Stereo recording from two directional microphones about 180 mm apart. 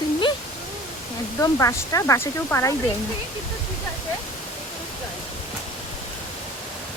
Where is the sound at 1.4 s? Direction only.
15° left (ahead or behind).